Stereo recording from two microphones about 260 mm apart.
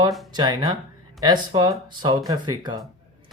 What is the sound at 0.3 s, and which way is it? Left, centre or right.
Speech, centre.